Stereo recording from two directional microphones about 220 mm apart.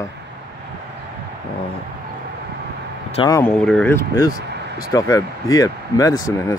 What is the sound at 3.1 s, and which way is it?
Speech, 15° left (ahead or behind).